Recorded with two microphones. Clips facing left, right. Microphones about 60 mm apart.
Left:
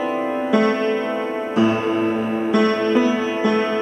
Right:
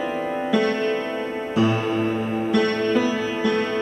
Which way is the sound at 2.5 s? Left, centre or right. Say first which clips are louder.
Left 3 dB; centre.